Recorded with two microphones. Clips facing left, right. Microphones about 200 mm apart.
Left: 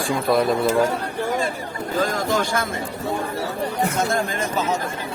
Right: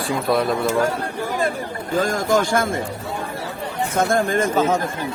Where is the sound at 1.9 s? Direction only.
45° right (ahead or behind).